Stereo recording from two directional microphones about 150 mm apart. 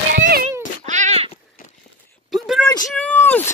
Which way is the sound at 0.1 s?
80° right.